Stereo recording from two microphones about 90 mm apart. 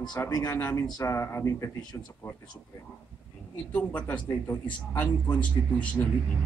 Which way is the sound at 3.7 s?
15° left (ahead or behind).